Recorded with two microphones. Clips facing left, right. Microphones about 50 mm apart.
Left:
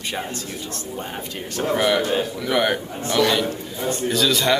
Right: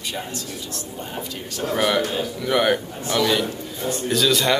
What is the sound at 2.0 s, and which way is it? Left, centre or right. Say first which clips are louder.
Speech: left 2 dB; left.